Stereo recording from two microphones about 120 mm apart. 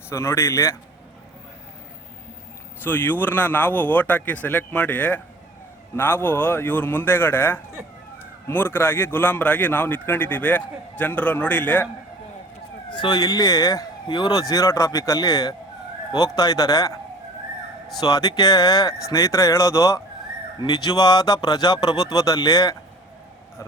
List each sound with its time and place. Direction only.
0.1 s speech: 20° left (ahead or behind)
2.8 s a man's voice: 15° left (ahead or behind)
12.9 s speech: 40° left (ahead or behind)
18.0 s speech: 30° left (ahead or behind)